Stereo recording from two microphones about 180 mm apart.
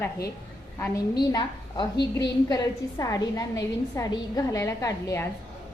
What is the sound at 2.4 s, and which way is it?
A woman's voice, 20° left (ahead or behind).